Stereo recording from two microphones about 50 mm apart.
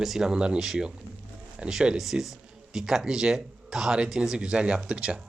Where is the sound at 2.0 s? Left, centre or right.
Centre.